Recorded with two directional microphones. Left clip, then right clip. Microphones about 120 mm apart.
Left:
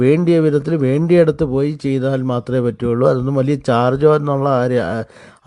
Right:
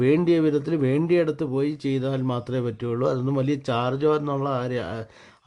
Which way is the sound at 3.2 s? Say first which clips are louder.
Left 8 dB; 30° left (ahead or behind).